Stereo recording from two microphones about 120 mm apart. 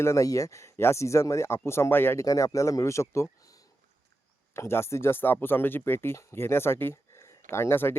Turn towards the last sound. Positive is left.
turn(degrees=20)  # may be behind; listen again after turning